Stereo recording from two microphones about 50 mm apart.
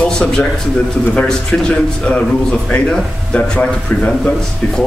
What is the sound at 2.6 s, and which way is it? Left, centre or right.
Speech, centre.